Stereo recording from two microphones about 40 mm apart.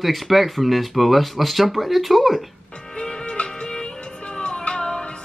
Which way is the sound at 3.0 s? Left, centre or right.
Left.